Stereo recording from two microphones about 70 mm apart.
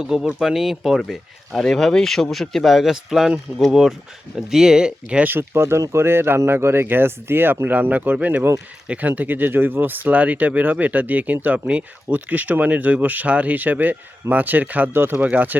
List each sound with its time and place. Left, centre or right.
0.0 s speech: centre
5.2 s speech: right